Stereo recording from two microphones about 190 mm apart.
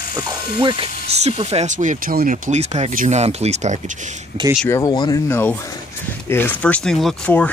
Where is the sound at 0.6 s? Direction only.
25° right (ahead or behind).